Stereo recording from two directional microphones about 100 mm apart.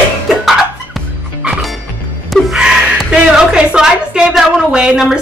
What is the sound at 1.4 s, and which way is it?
Music, 10° right (ahead or behind).